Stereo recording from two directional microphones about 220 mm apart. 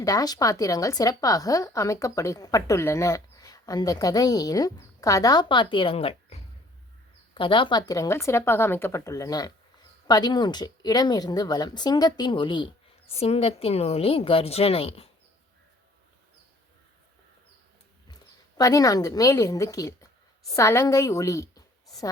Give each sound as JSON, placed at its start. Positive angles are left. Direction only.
{"t": 0.0, "sound": "a woman's voice", "side_deg": 15}
{"t": 18.1, "sound": "a woman's voice", "side_deg": 15}